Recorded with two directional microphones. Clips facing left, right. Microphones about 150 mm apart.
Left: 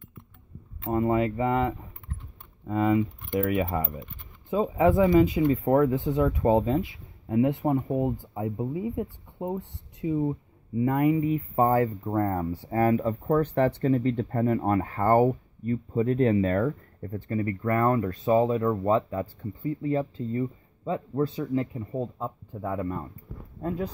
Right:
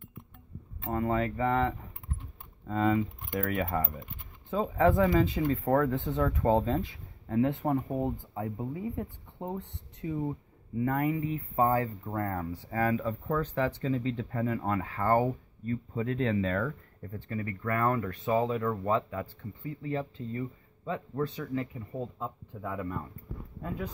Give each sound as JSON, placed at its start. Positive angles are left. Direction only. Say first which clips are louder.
{"t": 0.8, "sound": "speech", "louder": "left 5 dB", "side_deg": 20}
{"t": 11.5, "sound": "speech", "louder": "left 3 dB", "side_deg": 35}
{"t": 12.6, "sound": "speech", "louder": "left 6 dB", "side_deg": 40}
{"t": 13.4, "sound": "speech", "louder": "left 7 dB", "side_deg": 55}
{"t": 15.7, "sound": "speech", "louder": "left 6 dB", "side_deg": 30}
{"t": 16.1, "sound": "speech", "louder": "left 6 dB", "side_deg": 45}